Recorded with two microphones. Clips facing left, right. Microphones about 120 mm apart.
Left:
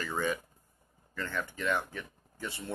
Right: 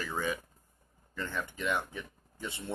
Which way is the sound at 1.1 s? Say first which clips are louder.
Left 1 dB; 15° right (ahead or behind).